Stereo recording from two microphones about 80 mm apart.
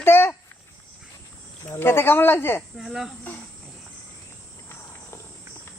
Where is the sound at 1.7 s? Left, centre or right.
Left.